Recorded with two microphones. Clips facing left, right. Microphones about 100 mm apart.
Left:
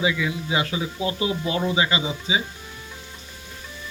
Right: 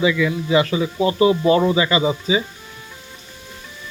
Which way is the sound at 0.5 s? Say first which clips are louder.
Right 9 dB; 60° right (ahead or behind).